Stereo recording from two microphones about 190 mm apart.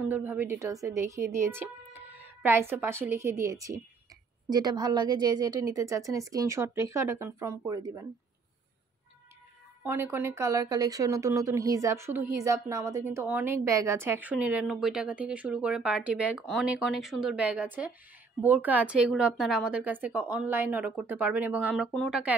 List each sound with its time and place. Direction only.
0.0 s speech: 10° right (ahead or behind)
9.8 s speech: 10° right (ahead or behind)